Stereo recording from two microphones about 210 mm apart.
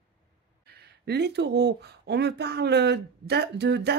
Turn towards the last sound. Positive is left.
turn(degrees=-55)  # may be behind; listen again after turning